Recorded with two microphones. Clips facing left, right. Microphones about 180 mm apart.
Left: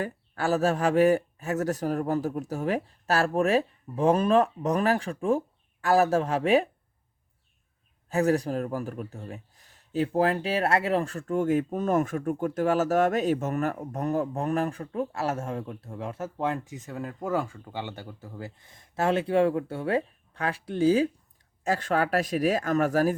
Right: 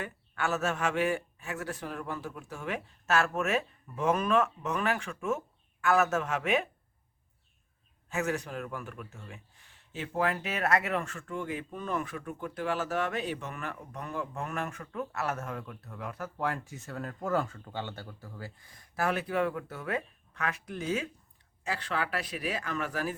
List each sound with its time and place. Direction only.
0.0 s a man's voice: 35° left (ahead or behind)
8.1 s a man's voice: 35° left (ahead or behind)
21.6 s a man's voice: 45° left (ahead or behind)